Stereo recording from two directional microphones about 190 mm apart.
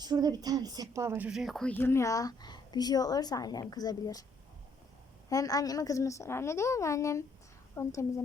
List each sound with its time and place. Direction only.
0.0 s speech: 20° right (ahead or behind); by 4.3 s 20° left (ahead or behind)
5.3 s speech: 20° left (ahead or behind)